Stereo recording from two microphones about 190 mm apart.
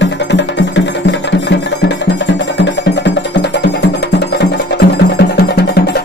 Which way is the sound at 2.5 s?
70° left (ahead or behind).